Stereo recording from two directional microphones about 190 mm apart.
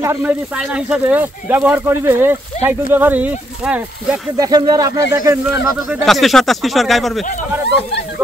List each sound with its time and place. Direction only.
0.0 s speech: 15° right (ahead or behind)
0.6 s speech: 5° right (ahead or behind)
4.4 s speech: 20° right (ahead or behind)
5.9 s speech: centre (ahead or behind)